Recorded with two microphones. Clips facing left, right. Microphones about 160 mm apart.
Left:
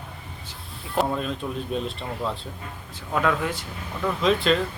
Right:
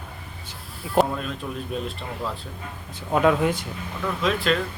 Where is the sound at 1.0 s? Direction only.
Centre (ahead or behind).